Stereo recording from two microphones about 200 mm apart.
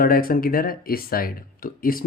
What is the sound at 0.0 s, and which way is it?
Speech, 45° left (ahead or behind).